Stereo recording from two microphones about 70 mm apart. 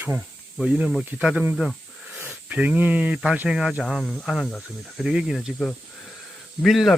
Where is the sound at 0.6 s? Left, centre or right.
Centre.